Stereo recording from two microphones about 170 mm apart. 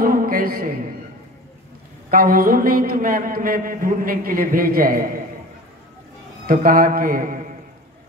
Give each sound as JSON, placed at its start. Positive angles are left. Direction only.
{"t": 0.0, "sound": "a sound", "side_deg": -55}
{"t": 2.0, "sound": "a man's voice", "side_deg": -55}
{"t": 6.4, "sound": "a man's voice", "side_deg": -55}